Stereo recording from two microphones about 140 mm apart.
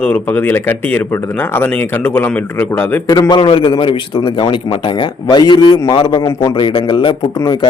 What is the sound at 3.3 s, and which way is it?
A man's voice, 35° left (ahead or behind).